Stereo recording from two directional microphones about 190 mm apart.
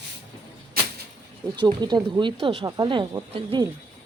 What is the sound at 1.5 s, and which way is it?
Speech, 20° right (ahead or behind).